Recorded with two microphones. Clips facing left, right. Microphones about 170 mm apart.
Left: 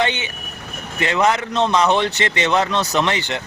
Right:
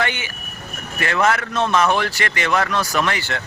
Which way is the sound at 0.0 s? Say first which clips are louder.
Left 3 dB; 20° left (ahead or behind).